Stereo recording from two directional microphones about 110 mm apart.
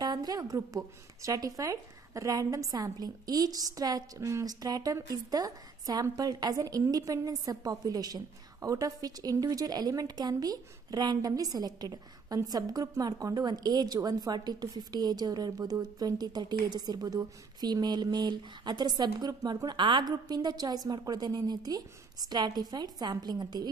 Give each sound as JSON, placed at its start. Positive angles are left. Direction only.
{"t": 0.0, "sound": "a woman's voice", "side_deg": -40}